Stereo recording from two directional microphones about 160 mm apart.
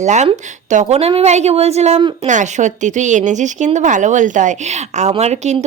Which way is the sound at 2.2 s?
50° right (ahead or behind).